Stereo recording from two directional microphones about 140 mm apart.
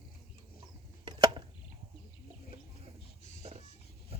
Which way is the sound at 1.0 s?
30° right (ahead or behind).